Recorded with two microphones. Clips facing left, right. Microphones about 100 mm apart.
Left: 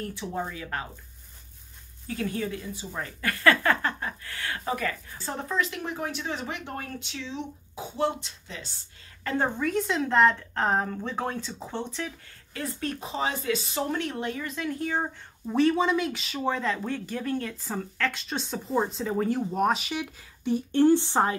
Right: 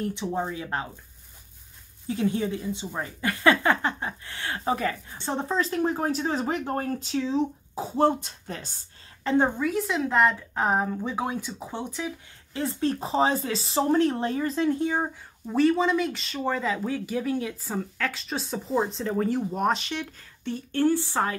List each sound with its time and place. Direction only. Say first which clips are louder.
0.0 s a woman's voice: right 4 dB; 20° right (ahead or behind)
2.0 s a woman's voice: right 4 dB; 20° right (ahead or behind); by 8.7 s 45° right (ahead or behind)
9.2 s a woman's voice: right 5 dB; 20° right (ahead or behind)
9.6 s speech: right 1 dB; 5° right (ahead or behind)
12.5 s speech: right 6 dB; 30° right (ahead or behind)
15.4 s speech: right 1 dB; centre (ahead or behind); by 21.4 s 25° left (ahead or behind)